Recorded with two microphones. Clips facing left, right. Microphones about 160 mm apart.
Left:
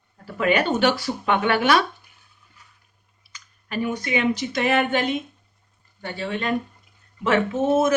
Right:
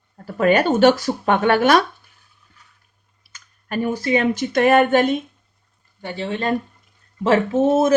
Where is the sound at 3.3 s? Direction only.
45° right (ahead or behind).